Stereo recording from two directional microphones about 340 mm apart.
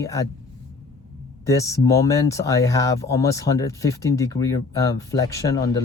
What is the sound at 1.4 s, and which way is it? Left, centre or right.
Speech, centre.